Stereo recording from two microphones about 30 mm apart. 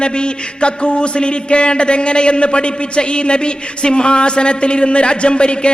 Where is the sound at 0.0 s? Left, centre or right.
Left.